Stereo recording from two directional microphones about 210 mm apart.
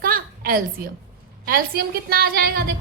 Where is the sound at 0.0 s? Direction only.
45° right (ahead or behind).